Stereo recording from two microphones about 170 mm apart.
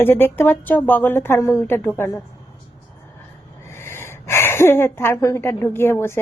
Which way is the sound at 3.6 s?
15° left (ahead or behind).